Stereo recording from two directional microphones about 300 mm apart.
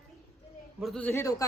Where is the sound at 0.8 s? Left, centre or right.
Centre.